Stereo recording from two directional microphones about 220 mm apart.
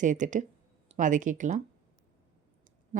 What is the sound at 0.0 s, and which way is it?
Speech, 35° right (ahead or behind).